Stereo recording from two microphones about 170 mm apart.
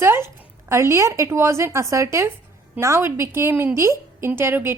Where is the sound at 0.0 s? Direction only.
15° right (ahead or behind).